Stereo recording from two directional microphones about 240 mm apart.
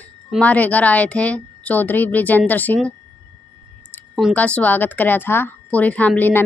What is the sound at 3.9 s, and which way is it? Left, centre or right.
A woman's voice, centre.